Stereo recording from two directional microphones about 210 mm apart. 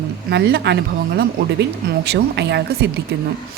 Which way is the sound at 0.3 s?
55° right (ahead or behind).